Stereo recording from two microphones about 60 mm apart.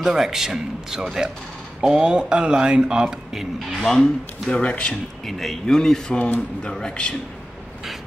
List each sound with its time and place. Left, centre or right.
0.0 s speech: centre
3.5 s speech: centre
4.5 s speech: centre
5.2 s speech: centre